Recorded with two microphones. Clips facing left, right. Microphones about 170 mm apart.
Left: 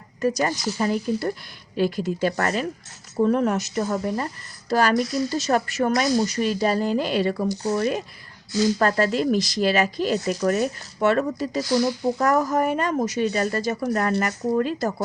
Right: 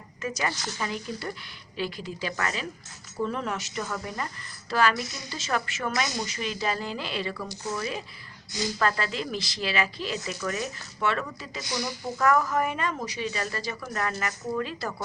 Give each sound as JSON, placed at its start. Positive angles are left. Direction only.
{"t": 0.2, "sound": "speech", "side_deg": 40}
{"t": 11.7, "sound": "speech", "side_deg": 55}
{"t": 12.1, "sound": "speech", "side_deg": 40}